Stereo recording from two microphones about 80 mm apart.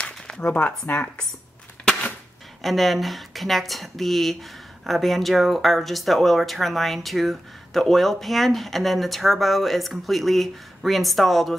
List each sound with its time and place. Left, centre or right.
0.4 s speech: left
2.6 s speech: centre